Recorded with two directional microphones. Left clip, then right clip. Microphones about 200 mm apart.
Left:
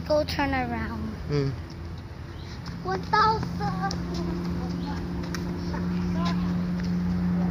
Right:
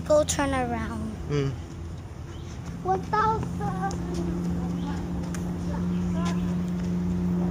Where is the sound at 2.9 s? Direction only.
20° right (ahead or behind).